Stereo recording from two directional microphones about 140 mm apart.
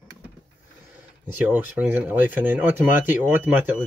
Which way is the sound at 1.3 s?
10° right (ahead or behind).